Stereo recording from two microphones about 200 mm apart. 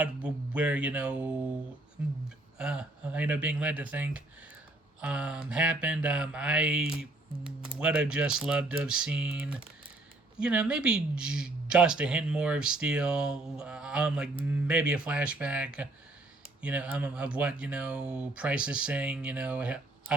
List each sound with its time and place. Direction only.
0.0 s speech: 5° right (ahead or behind)
2.6 s speech: 5° right (ahead or behind)